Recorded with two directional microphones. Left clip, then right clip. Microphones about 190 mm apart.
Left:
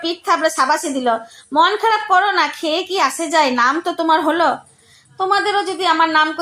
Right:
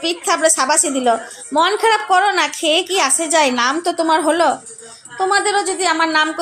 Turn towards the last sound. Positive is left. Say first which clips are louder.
# left 1 dB
turn(degrees=-20)  # may be behind; listen again after turning